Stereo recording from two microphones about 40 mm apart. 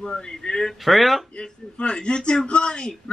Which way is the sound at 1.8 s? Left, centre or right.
Left.